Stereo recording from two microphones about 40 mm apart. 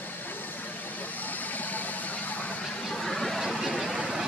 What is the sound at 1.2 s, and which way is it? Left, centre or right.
Vehicle, left.